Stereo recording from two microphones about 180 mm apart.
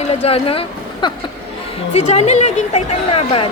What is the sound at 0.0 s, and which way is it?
A woman's voice, 35° left (ahead or behind).